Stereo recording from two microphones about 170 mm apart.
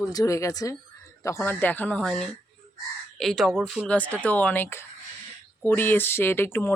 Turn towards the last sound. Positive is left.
turn(degrees=15)  # may be behind; listen again after turning